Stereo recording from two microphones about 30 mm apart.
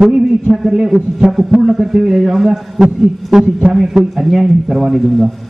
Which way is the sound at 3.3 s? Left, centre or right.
Right.